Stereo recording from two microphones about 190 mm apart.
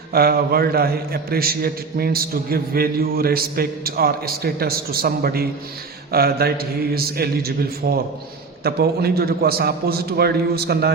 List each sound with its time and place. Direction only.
0.1 s a man's voice: 55° right (ahead or behind)